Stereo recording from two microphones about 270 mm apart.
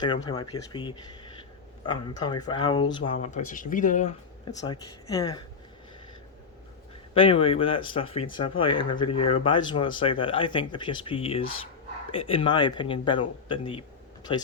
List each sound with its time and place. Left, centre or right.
0.3 s speech: centre
4.6 s speech: centre
7.1 s speech: left